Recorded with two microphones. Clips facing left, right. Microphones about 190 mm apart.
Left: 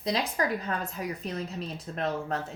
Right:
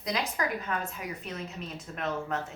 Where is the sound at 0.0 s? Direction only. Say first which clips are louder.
Left 3 dB; 30° left (ahead or behind).